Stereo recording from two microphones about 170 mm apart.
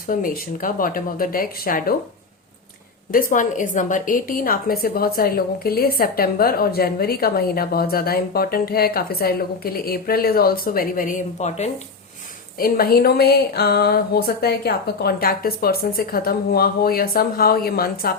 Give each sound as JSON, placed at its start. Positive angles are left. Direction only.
{"t": 0.1, "sound": "a woman's voice", "side_deg": 55}
{"t": 3.1, "sound": "a woman's voice", "side_deg": 55}
{"t": 12.5, "sound": "a woman's voice", "side_deg": 60}